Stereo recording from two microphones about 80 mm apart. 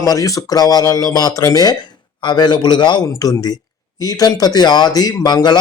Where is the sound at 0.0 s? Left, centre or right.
Left.